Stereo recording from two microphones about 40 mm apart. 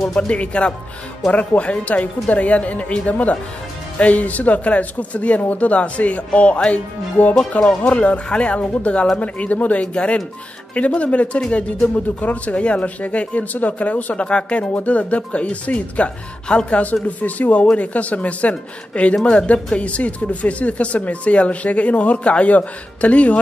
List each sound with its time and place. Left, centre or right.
0.3 s speech: left
7.2 s speech: left
7.8 s speech: left
9.9 s speech: left
16.4 s speech: left
16.8 s speech: left